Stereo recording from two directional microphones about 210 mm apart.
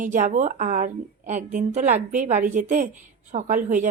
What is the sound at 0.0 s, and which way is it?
Speech, 40° right (ahead or behind).